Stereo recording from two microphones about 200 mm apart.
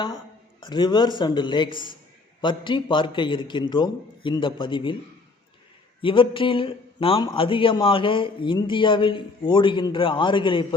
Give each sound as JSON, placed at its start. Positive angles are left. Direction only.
{"t": 0.6, "sound": "a man's voice", "side_deg": 20}
{"t": 6.0, "sound": "a man's voice", "side_deg": 25}